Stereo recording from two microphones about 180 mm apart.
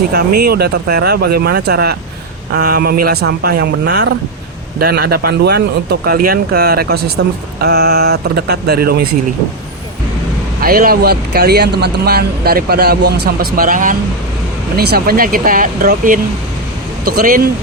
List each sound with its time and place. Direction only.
0.1 s speech: 60° right (ahead or behind)
10.6 s speech: 55° right (ahead or behind)
14.8 s speech: 60° right (ahead or behind)